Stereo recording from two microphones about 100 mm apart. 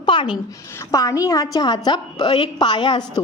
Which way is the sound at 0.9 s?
35° left (ahead or behind).